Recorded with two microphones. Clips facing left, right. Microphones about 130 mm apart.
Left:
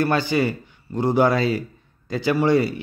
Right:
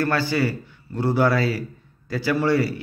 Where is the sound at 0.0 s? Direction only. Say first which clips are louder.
Left 2 dB; 20° left (ahead or behind).